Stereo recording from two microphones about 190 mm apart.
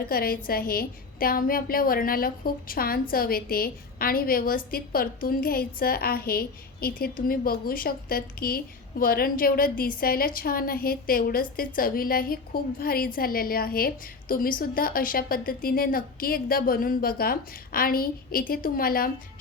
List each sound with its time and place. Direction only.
0.1 s a woman's voice: 50° left (ahead or behind)